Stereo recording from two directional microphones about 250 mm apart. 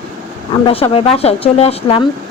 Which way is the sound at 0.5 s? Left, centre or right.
Left.